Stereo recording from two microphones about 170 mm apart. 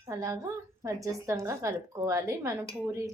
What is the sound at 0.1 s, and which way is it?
A woman's voice, 20° right (ahead or behind).